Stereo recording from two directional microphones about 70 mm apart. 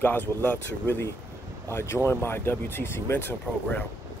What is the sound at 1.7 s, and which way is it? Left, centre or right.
Speech, left.